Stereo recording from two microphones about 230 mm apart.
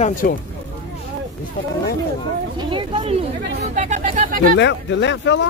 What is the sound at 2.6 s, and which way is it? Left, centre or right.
Speech, right.